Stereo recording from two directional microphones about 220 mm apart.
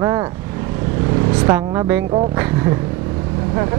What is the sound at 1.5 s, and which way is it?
Speech, 15° right (ahead or behind).